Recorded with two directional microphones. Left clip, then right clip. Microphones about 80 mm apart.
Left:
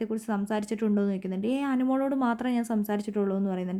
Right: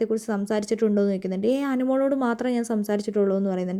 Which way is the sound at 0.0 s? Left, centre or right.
Right.